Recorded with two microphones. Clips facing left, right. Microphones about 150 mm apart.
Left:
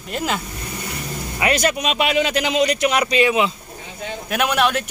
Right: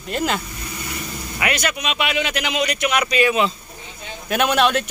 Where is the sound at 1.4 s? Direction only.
40° left (ahead or behind); by 3.4 s 20° left (ahead or behind).